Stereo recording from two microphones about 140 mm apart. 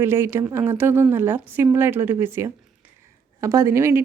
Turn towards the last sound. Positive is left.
turn(degrees=-20)  # may be behind; listen again after turning